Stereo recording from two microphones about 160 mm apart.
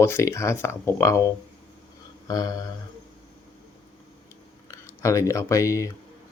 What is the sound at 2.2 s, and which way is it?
Mantra, 25° left (ahead or behind).